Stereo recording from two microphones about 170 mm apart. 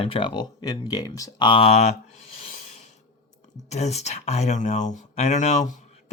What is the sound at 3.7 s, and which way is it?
Speech, 40° left (ahead or behind).